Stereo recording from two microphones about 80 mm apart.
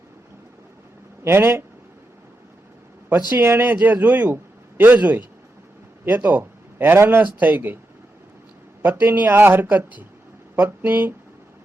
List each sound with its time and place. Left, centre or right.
1.2 s speech: right
3.3 s a man's voice: right
8.8 s speech: right